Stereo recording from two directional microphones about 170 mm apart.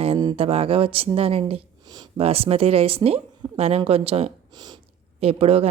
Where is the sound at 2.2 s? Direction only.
35° right (ahead or behind).